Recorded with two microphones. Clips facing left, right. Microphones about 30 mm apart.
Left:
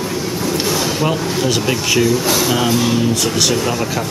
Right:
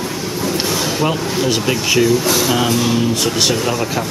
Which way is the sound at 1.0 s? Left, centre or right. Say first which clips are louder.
Even; centre.